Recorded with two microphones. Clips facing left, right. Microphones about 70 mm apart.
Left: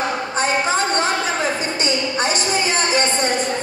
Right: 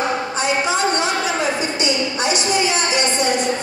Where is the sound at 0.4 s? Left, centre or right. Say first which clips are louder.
Left 1 dB; left.